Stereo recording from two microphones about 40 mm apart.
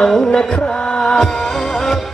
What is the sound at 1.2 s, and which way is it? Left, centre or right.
Music, centre.